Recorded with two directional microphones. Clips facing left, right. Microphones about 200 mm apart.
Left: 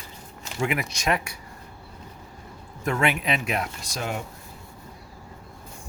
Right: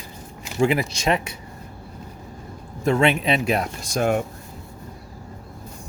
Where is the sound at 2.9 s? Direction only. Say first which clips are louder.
Right 6 dB; 25° right (ahead or behind); by 4.2 s 50° right (ahead or behind).